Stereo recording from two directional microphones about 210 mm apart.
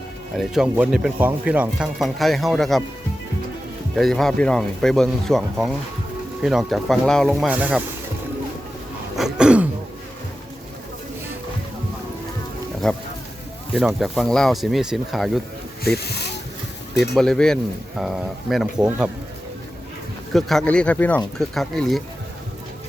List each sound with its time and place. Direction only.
0.3 s speech: 5° right (ahead or behind)
3.9 s speech: centre (ahead or behind)
9.1 s throat clearing: 5° right (ahead or behind)
12.8 s speech: centre (ahead or behind)
16.0 s speech: 50° left (ahead or behind)
17.2 s speech: 5° left (ahead or behind)
20.3 s speech: centre (ahead or behind)